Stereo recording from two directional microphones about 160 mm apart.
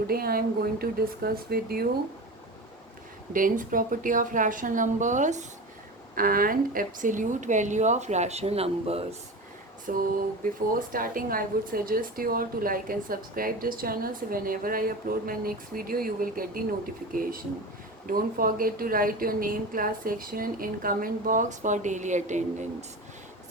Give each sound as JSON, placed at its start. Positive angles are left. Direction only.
{"t": 0.1, "sound": "speech", "side_deg": -70}
{"t": 3.3, "sound": "speech", "side_deg": -55}
{"t": 6.1, "sound": "a woman's voice", "side_deg": -60}
{"t": 9.9, "sound": "speech", "side_deg": -60}
{"t": 18.0, "sound": "speech", "side_deg": -60}